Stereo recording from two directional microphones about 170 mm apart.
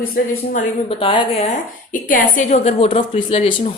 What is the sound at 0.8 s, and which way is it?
Speech, 30° left (ahead or behind).